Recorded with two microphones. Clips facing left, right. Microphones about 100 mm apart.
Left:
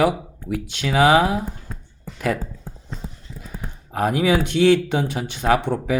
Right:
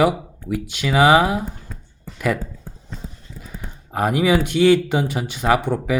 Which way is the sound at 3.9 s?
5° right (ahead or behind).